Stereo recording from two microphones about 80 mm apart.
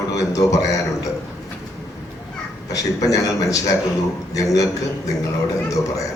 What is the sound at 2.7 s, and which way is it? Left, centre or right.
A man's voice, left.